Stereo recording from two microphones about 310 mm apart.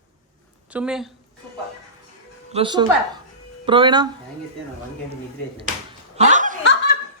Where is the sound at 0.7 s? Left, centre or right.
Centre.